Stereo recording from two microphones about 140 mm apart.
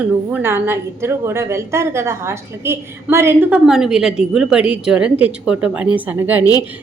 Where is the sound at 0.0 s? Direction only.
10° right (ahead or behind).